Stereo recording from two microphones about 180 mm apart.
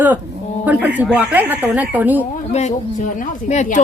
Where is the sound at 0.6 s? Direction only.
10° right (ahead or behind).